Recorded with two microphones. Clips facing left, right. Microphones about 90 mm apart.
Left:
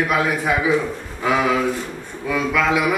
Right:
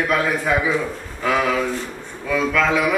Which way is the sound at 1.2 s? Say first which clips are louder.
Left 1 dB; 10° left (ahead or behind).